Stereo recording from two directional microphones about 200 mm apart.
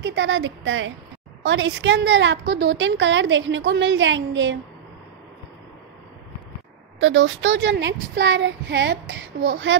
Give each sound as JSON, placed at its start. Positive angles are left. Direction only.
{"t": 0.0, "sound": "a woman's voice", "side_deg": -65}
{"t": 7.0, "sound": "a woman's voice", "side_deg": -70}